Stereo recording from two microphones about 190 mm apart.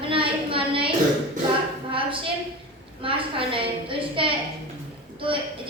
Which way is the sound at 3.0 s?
30° right (ahead or behind).